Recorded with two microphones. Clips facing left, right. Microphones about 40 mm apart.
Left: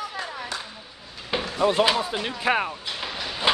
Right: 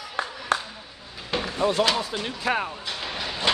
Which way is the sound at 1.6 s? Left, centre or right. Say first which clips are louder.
Left 2 dB; left.